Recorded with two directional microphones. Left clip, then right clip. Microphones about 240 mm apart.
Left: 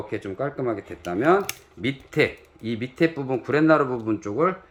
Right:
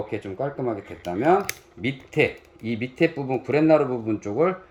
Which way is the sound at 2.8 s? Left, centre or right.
Left.